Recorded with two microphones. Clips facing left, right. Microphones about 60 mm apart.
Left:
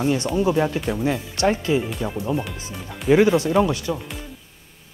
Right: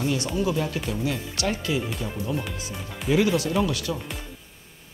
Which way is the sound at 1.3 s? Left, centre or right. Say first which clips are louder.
Left 7 dB; left.